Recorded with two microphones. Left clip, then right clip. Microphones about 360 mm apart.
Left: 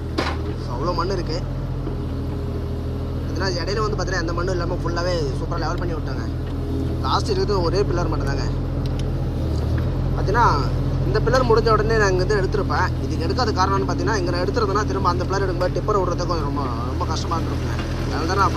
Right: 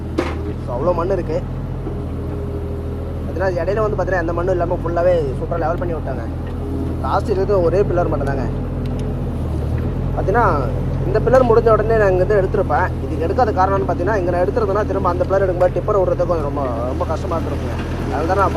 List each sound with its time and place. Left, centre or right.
0.9 s speech: centre
3.4 s speech: centre
7.0 s speech: centre
10.3 s speech: centre
11.1 s speech: right
11.7 s speech: centre
15.6 s speech: right
16.0 s speech: centre